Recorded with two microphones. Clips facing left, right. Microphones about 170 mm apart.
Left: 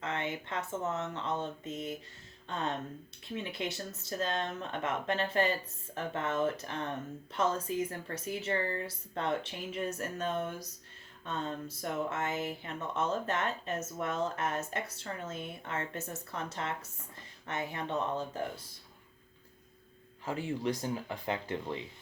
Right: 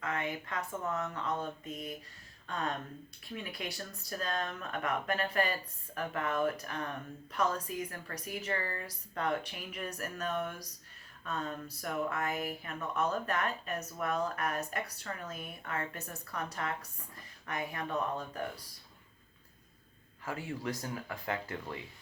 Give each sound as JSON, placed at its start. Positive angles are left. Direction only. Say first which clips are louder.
{"t": 0.0, "sound": "speech", "louder": "even", "side_deg": 25}
{"t": 20.2, "sound": "speech", "louder": "left 4 dB", "side_deg": 25}